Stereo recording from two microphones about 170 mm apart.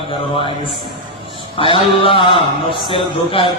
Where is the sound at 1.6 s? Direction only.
30° left (ahead or behind).